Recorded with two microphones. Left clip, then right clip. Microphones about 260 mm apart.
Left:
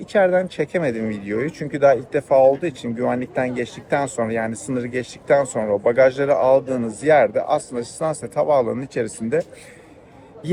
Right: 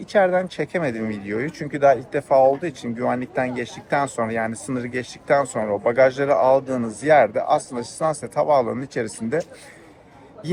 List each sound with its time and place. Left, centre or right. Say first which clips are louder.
0.1 s speech: left 1 dB; centre